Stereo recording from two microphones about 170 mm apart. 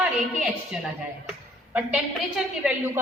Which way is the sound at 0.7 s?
5° right (ahead or behind).